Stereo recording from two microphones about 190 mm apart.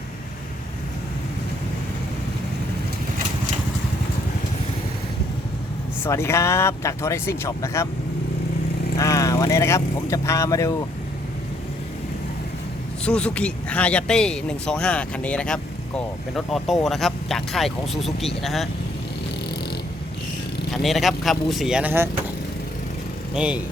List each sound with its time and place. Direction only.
6.1 s speech: 15° left (ahead or behind)
9.0 s speech: 15° left (ahead or behind)
13.1 s speech: 5° left (ahead or behind)
20.8 s speech: centre (ahead or behind)
23.3 s speech: 5° right (ahead or behind)